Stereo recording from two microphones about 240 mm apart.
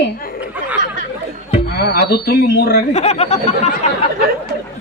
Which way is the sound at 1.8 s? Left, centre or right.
Left.